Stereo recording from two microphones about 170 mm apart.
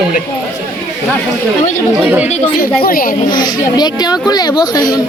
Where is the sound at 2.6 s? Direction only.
60° left (ahead or behind).